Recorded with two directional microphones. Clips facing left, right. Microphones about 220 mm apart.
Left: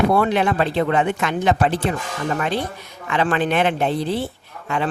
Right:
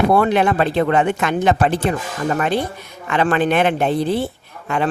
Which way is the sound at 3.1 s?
50° right (ahead or behind).